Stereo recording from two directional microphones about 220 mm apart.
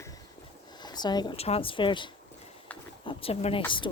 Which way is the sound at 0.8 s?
20° left (ahead or behind).